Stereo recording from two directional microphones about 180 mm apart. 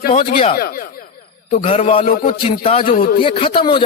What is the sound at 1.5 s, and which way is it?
Speech, 35° left (ahead or behind).